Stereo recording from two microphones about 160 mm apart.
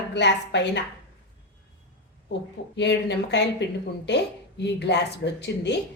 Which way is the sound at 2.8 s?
90° left.